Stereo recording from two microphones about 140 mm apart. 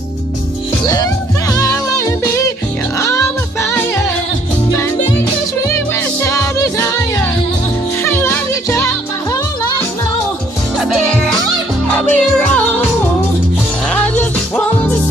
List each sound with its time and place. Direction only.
1.5 s music: 25° left (ahead or behind)
6.2 s music: 20° left (ahead or behind)
8.0 s music: 15° left (ahead or behind)
10.8 s music: 5° left (ahead or behind)
13.9 s music: 10° left (ahead or behind)